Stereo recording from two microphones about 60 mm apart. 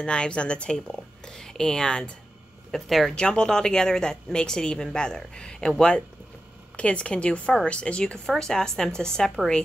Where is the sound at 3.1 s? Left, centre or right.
Centre.